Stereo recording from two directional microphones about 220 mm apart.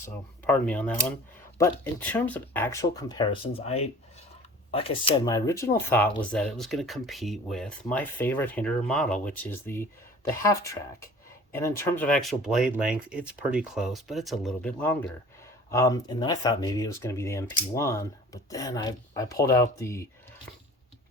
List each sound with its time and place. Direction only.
0.4 s speech: 5° left (ahead or behind)